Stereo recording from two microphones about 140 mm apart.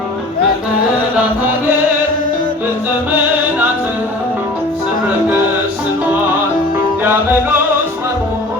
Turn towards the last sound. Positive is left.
turn(degrees=-15)  # may be behind; listen again after turning